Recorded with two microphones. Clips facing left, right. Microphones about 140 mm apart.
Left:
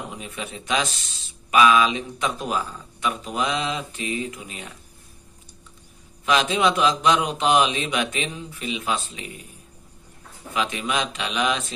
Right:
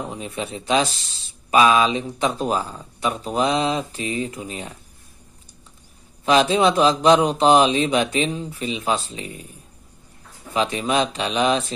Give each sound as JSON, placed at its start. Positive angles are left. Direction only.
{"t": 0.1, "sound": "speech", "side_deg": -35}
{"t": 6.2, "sound": "speech", "side_deg": -35}
{"t": 10.5, "sound": "speech", "side_deg": -35}